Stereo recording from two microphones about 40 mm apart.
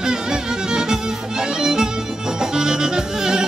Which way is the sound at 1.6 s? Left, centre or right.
Centre.